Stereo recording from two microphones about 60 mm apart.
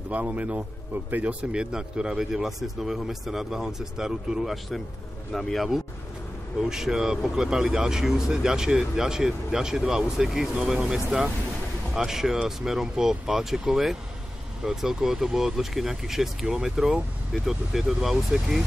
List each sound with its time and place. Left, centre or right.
0.1 s a man's voice: right; by 4.6 s centre
5.3 s speech: centre
6.6 s speech: centre